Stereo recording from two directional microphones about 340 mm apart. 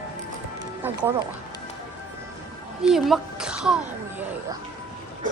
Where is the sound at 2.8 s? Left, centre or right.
Centre.